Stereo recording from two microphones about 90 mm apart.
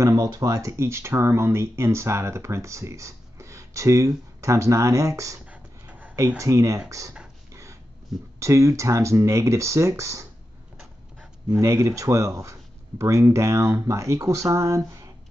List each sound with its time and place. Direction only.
0.0 s speech: 45° right (ahead or behind)
5.5 s beatboxing: 15° right (ahead or behind)
6.1 s speech: 35° right (ahead or behind)
8.4 s speech: 35° right (ahead or behind)
11.6 s speech: 35° right (ahead or behind)